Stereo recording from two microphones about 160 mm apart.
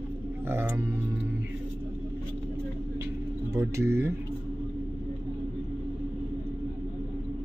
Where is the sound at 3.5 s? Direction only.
15° right (ahead or behind).